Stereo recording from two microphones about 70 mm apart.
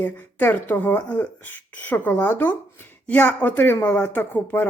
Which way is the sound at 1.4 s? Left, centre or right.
Left.